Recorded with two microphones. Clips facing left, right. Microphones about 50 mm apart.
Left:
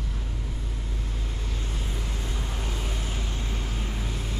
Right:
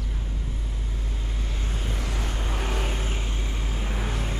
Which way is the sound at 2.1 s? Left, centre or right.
Right.